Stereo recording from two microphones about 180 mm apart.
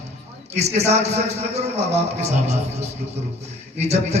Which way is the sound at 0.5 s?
35° right (ahead or behind).